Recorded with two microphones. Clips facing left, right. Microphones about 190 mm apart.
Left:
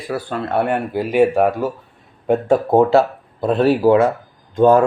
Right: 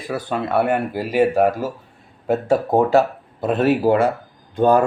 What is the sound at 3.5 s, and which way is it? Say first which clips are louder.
Speech: left 2 dB; 45° right (ahead or behind).